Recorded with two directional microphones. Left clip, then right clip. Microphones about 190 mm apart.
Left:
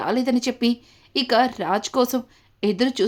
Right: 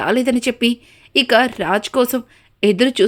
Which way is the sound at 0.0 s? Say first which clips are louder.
Right 5 dB; 10° right (ahead or behind).